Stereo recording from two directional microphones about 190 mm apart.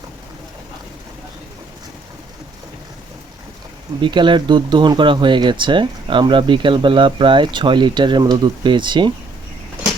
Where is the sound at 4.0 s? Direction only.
25° right (ahead or behind).